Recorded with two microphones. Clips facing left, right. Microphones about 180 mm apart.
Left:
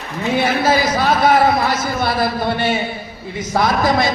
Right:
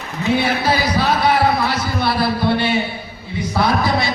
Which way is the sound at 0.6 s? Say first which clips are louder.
Left 2 dB; 45° left (ahead or behind).